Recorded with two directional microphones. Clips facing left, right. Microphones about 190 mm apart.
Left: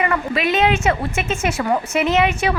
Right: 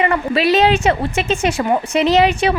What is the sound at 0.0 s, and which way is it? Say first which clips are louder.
A woman's voice: right 4 dB; 30° right (ahead or behind).